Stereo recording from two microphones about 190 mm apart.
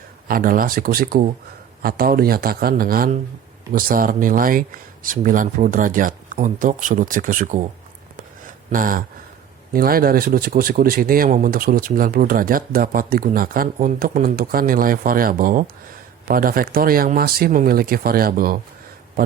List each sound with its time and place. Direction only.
0.3 s speech: 50° right (ahead or behind)
8.7 s speech: 45° right (ahead or behind)